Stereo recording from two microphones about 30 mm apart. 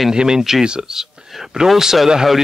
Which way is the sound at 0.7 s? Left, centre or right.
Right.